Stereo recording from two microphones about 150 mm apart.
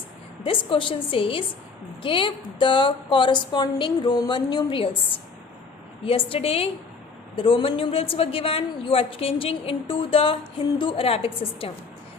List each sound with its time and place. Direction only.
0.4 s a woman's voice: 35° left (ahead or behind)